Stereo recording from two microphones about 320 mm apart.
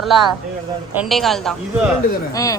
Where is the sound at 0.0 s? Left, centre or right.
Centre.